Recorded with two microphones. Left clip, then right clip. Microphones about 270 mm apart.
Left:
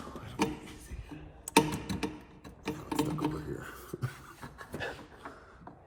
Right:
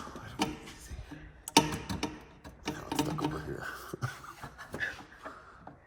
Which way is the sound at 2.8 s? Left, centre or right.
Centre.